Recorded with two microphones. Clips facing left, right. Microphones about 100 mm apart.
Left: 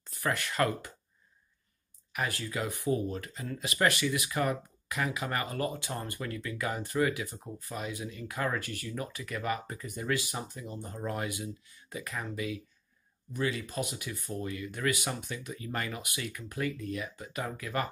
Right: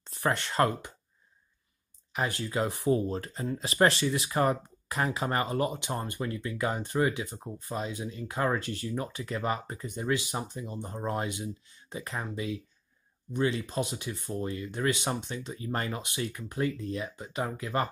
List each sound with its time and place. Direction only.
0.0 s speech: 30° right (ahead or behind)
2.1 s speech: 25° right (ahead or behind)